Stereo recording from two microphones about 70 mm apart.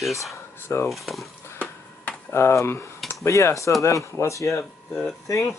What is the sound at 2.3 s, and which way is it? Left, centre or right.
Speech, left.